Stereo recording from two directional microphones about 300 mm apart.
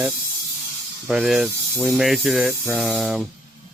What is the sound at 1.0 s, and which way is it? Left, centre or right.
Speech, centre.